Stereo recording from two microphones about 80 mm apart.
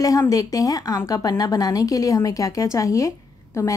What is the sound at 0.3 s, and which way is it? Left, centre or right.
A woman's voice, left.